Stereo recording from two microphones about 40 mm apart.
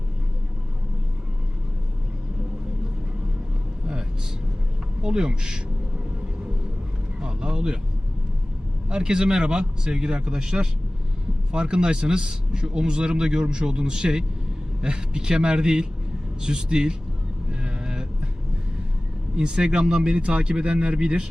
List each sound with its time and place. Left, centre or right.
5.0 s a man's voice: centre
7.2 s vehicle: centre
8.9 s a man's voice: right
17.6 s vehicle: centre
19.4 s a man's voice: right